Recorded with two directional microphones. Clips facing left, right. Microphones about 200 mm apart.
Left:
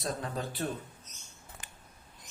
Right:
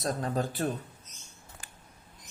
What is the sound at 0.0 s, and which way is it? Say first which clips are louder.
Speech: right 5 dB; 45° right (ahead or behind).